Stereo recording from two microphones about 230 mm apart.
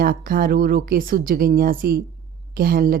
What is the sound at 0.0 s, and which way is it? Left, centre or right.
A woman's voice, right.